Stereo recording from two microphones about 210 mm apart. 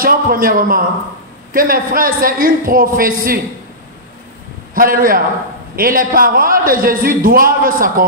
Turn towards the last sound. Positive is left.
turn(degrees=-40)  # may be behind; listen again after turning